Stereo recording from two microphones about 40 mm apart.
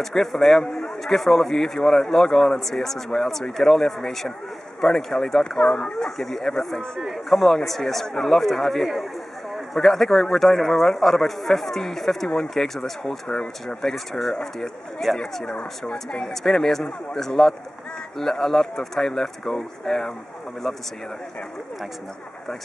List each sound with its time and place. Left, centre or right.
0.0 s a man's voice: centre
6.0 s a man's voice: centre
13.3 s speech: left
13.8 s a man's voice: centre